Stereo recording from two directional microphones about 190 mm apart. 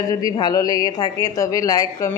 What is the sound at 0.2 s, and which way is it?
A woman's voice, 20° left (ahead or behind).